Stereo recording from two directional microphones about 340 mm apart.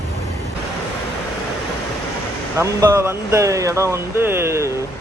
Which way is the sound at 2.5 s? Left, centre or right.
Centre.